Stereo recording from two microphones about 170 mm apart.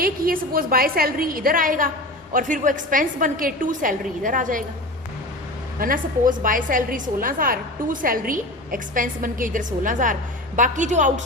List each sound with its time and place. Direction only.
0.0 s a woman's voice: 60° right (ahead or behind)
5.8 s a woman's voice: 55° right (ahead or behind)